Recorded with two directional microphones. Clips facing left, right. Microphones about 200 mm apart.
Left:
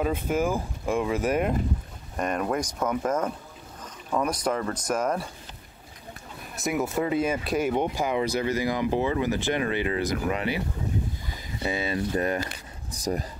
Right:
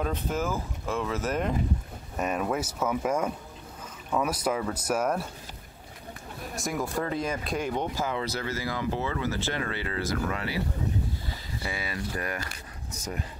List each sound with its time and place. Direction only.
0.0 s speech: 10° left (ahead or behind)
2.1 s speech: 5° right (ahead or behind)
6.7 s speech: 5° left (ahead or behind); by 12.4 s 25° left (ahead or behind)
12.9 s speech: 35° left (ahead or behind)